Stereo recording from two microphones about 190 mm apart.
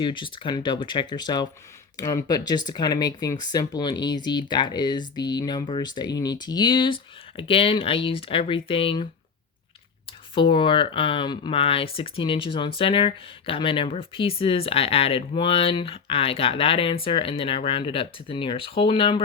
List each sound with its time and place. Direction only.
0.0 s speech: 25° left (ahead or behind)
10.3 s speech: 25° left (ahead or behind)